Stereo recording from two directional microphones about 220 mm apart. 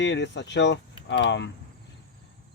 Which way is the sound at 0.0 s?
55° left (ahead or behind).